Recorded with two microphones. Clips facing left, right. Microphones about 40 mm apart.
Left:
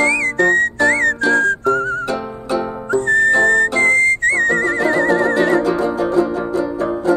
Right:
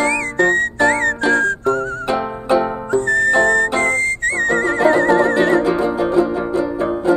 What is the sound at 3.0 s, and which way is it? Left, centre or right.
Music, left.